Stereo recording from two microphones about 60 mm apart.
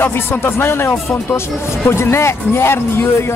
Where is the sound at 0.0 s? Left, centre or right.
Left.